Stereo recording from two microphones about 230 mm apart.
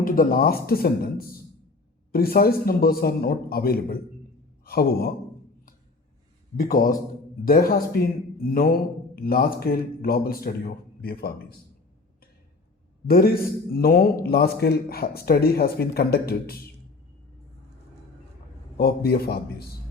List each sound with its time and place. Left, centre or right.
0.0 s speech: left
6.6 s speech: left
13.1 s speech: left
18.8 s a man's voice: left